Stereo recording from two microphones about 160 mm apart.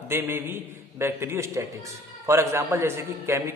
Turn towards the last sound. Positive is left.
turn(degrees=-15)  # may be behind; listen again after turning